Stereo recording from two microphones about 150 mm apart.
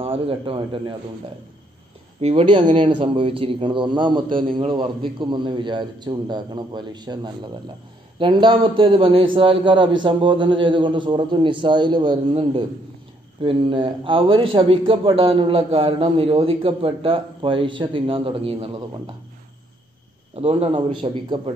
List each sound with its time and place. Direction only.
0.0 s a man's voice: 35° right (ahead or behind)
2.1 s a man's voice: 40° right (ahead or behind)
20.3 s a man's voice: 40° right (ahead or behind)